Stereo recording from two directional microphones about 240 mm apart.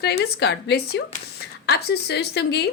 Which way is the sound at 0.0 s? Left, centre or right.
Left.